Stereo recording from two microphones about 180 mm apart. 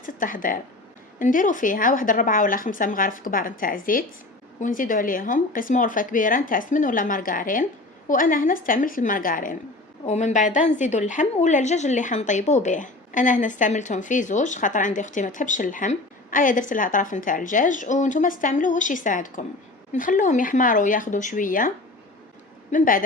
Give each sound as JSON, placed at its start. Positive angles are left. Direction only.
{"t": 0.0, "sound": "a woman's voice", "side_deg": 50}
{"t": 22.7, "sound": "a woman's voice", "side_deg": 50}